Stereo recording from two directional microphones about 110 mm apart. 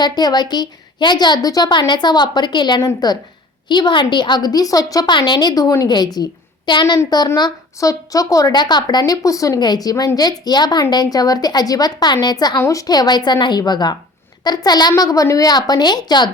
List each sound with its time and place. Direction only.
0.0 s a woman's voice: 40° left (ahead or behind)
12.5 s a woman's voice: 30° left (ahead or behind)